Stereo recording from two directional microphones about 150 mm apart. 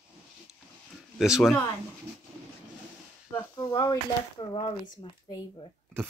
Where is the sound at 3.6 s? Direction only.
25° left (ahead or behind).